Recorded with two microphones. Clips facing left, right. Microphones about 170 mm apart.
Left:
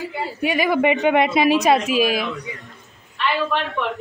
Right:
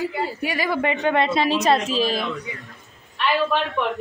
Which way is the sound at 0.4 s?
20° left (ahead or behind).